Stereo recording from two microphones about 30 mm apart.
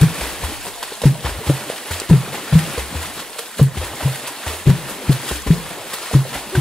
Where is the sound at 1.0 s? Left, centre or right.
Centre.